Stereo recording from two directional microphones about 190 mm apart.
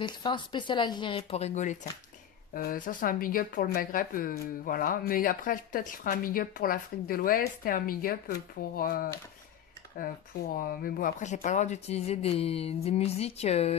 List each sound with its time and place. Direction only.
0.0 s speech: 25° left (ahead or behind)